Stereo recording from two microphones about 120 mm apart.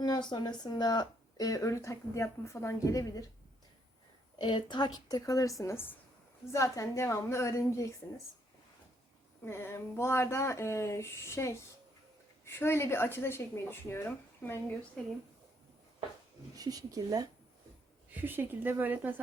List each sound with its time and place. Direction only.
0.0 s speech: 35° left (ahead or behind)
4.4 s speech: 40° left (ahead or behind); by 7.9 s 25° left (ahead or behind)
9.4 s speech: 20° left (ahead or behind)
15.0 s speech: 5° left (ahead or behind)
16.6 s speech: 30° right (ahead or behind)
18.1 s speech: 15° right (ahead or behind)